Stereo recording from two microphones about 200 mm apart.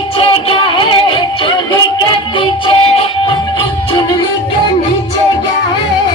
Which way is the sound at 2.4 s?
25° left (ahead or behind).